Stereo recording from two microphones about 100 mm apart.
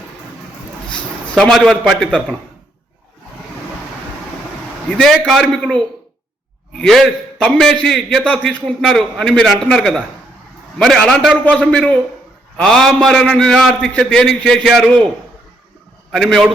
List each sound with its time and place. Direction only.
1.4 s a man's voice: 5° left (ahead or behind)
4.9 s a man's voice: 5° left (ahead or behind)
16.1 s a man's voice: centre (ahead or behind)